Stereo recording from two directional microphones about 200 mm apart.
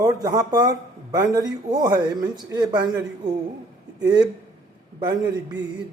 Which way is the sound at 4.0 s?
20° right (ahead or behind).